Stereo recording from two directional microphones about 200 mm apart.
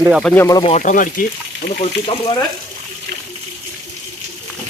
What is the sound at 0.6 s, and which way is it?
Speech, 35° left (ahead or behind).